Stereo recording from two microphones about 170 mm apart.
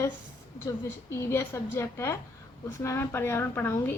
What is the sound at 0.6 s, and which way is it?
A woman's voice, 15° left (ahead or behind).